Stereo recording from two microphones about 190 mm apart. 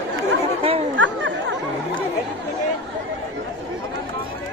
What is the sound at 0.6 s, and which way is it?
Chatter, 30° right (ahead or behind).